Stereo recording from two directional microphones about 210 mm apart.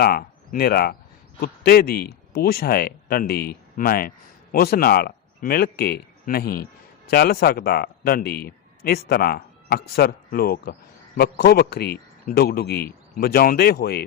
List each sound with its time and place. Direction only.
0.0 s a man's voice: 45° left (ahead or behind)